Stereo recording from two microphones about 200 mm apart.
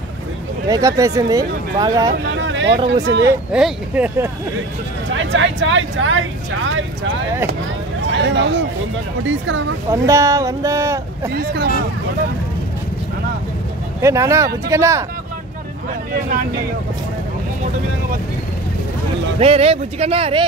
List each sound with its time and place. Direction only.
0.7 s speech: 15° right (ahead or behind)
2.3 s vehicle: 65° right (ahead or behind)
2.9 s speech: 60° right (ahead or behind)
3.5 s speech: 5° right (ahead or behind)
5.1 s speech: 70° right (ahead or behind)
8.1 s speech: 65° right (ahead or behind)
10.0 s speech: 15° right (ahead or behind)
11.3 s speech: 55° right (ahead or behind)
14.0 s speech: 15° right (ahead or behind)
19.4 s speech: 30° right (ahead or behind)